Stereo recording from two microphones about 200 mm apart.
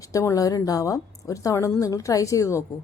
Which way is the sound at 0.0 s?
15° left (ahead or behind).